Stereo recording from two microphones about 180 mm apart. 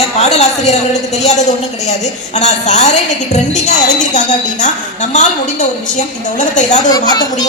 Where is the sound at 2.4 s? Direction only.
40° left (ahead or behind).